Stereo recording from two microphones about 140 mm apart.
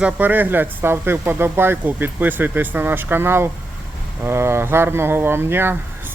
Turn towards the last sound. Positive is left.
turn(degrees=-15)  # may be behind; listen again after turning